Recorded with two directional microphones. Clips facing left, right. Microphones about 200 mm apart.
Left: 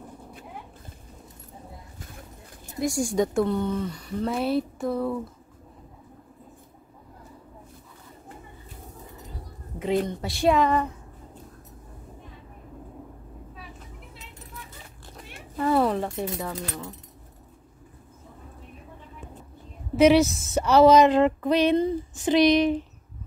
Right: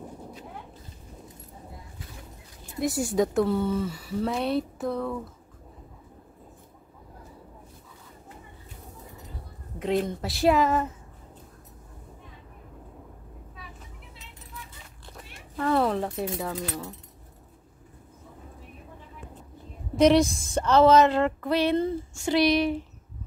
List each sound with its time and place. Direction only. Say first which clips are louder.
2.8 s speech: even; 5° right (ahead or behind)
9.8 s speech: left 1 dB; centre (ahead or behind)
15.5 s speech: left 2 dB; 10° left (ahead or behind)
20.0 s speech: left 2 dB; 5° left (ahead or behind)